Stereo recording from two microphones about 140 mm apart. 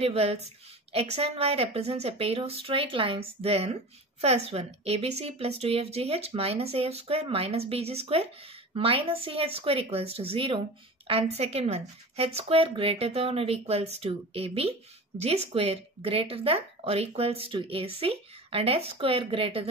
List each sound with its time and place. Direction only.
0.0 s a woman's voice: 45° right (ahead or behind)